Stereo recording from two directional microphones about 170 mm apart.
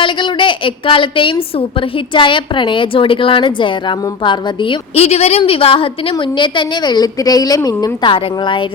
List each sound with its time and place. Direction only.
0.0 s a woman's voice: 30° left (ahead or behind)